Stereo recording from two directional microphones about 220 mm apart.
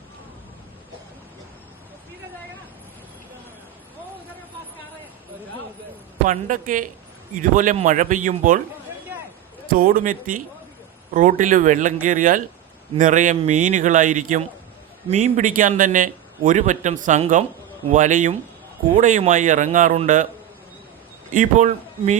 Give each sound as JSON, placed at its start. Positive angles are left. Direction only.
{"t": 6.2, "sound": "a man's voice", "side_deg": -35}
{"t": 9.6, "sound": "a man's voice", "side_deg": -40}
{"t": 21.3, "sound": "a man's voice", "side_deg": -35}